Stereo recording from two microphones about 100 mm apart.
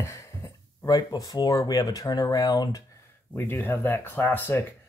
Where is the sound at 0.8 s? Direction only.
40° left (ahead or behind).